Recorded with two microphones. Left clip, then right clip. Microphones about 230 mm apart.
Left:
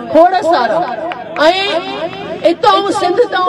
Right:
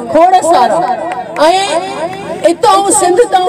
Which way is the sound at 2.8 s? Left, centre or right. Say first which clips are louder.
Right 4 dB; right.